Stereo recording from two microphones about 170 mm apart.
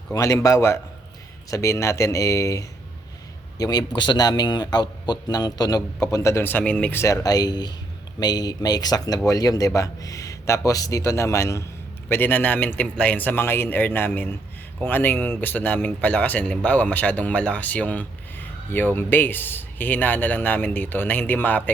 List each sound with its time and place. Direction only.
0.1 s a man's voice: 20° left (ahead or behind)